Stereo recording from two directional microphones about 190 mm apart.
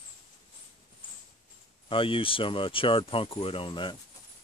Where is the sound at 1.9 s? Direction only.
30° left (ahead or behind).